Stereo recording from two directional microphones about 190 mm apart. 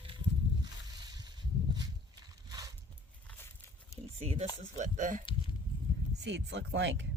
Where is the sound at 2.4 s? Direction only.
20° right (ahead or behind).